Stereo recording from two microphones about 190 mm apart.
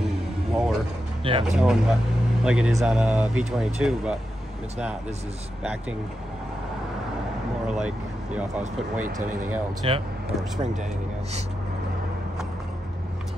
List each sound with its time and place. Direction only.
0.5 s vehicle: centre (ahead or behind)
1.2 s speech: 30° right (ahead or behind)
1.6 s speech: 5° right (ahead or behind)
5.6 s speech: 5° right (ahead or behind)
7.6 s speech: 5° right (ahead or behind)
9.0 s speech: 45° right (ahead or behind)
9.8 s speech: 30° right (ahead or behind)